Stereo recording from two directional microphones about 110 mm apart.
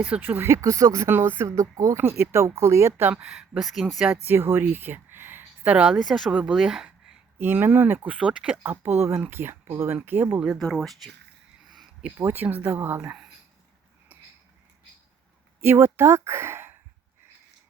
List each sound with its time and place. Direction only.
0.0 s speech: 15° right (ahead or behind)
4.3 s speech: 20° right (ahead or behind)
7.3 s speech: 20° right (ahead or behind)
10.6 s speech: 5° left (ahead or behind)
11.6 s a sound: centre (ahead or behind)
12.1 s speech: 20° right (ahead or behind)
15.6 s speech: 20° right (ahead or behind)